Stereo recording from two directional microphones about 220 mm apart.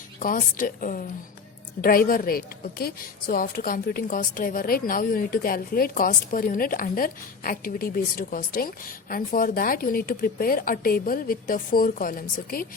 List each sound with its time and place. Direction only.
0.2 s a woman's voice: 40° left (ahead or behind)